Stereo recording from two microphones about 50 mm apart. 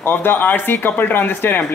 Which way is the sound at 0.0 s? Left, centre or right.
Left.